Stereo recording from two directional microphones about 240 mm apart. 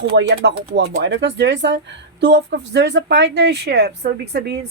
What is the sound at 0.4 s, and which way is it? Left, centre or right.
Speech, right.